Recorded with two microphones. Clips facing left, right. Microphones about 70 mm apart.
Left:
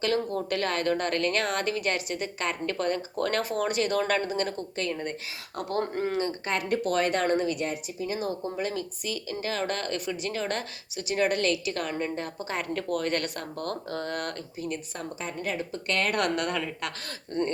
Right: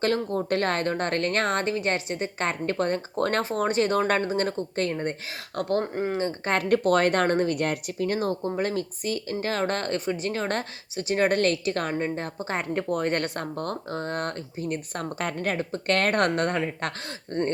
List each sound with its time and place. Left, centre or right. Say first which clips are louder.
0.0 s speech: right 2 dB; right
5.8 s speech: right 1 dB; centre
6.1 s speech: right 1 dB; right
6.4 s speech: right 5 dB; right
15.2 s speech: right 4 dB; right